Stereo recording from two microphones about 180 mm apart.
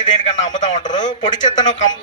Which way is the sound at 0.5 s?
45° left (ahead or behind).